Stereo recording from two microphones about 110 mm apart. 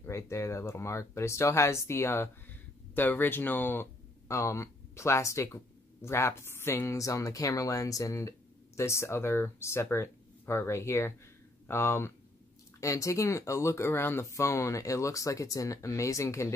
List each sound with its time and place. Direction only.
0.0 s speech: 25° left (ahead or behind)